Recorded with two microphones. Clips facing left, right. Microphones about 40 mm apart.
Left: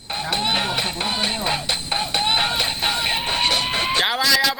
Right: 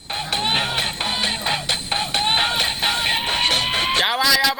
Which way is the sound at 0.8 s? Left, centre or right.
Right.